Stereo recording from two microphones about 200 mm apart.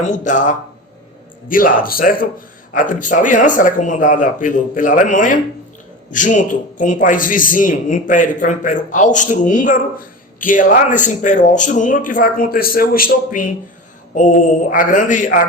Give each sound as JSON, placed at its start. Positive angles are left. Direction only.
{"t": 0.0, "sound": "a man's voice", "side_deg": 40}